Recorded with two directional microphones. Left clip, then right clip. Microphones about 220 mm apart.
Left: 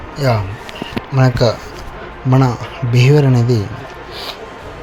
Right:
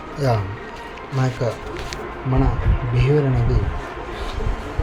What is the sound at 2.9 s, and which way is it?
Speech, 50° left (ahead or behind).